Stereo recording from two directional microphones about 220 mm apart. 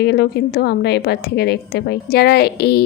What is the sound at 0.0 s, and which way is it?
A woman's voice, 50° left (ahead or behind).